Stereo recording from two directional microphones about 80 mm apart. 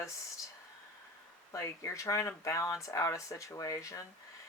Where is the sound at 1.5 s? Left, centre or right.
Left.